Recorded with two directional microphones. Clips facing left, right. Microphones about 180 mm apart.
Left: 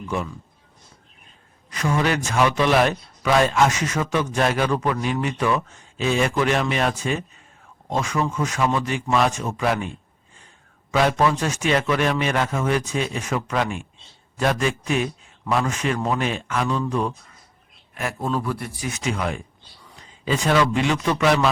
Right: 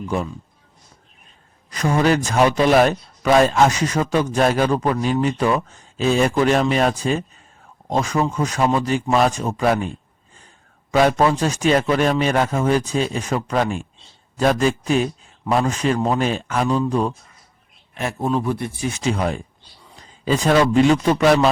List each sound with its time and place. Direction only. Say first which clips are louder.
1.7 s a man's voice: right 4 dB; 35° right (ahead or behind)
11.2 s a man's voice: right 3 dB; 30° right (ahead or behind)